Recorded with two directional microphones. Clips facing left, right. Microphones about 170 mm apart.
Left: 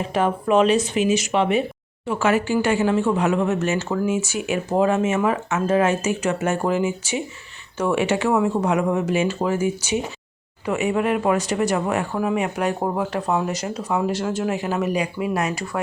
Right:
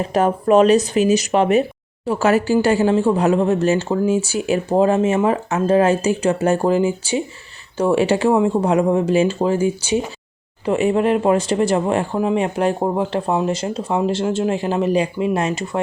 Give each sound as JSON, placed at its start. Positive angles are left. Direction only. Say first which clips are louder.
{"t": 0.1, "sound": "speech", "louder": "right 4 dB", "side_deg": -40}